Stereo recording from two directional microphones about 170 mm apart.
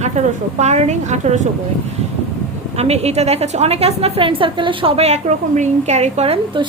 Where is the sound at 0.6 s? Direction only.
45° right (ahead or behind).